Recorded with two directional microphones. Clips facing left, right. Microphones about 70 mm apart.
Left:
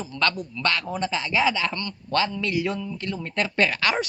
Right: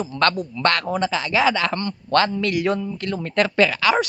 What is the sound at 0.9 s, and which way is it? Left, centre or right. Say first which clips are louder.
Speech: right 5 dB; right.